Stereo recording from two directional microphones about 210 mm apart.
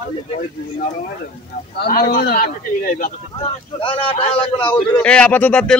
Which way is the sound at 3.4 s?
25° left (ahead or behind).